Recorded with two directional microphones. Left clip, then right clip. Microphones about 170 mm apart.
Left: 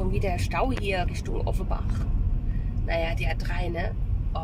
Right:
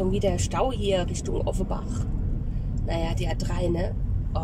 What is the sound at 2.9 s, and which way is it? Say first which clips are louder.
Speech: left 2 dB; 15° right (ahead or behind).